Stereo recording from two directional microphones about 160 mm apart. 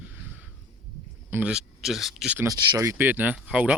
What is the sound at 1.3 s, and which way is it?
Speech, 10° right (ahead or behind).